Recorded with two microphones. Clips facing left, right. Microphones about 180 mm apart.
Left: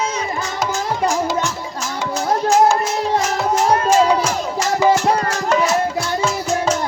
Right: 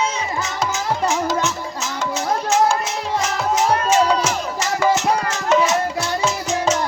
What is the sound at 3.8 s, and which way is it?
Music, 10° left (ahead or behind).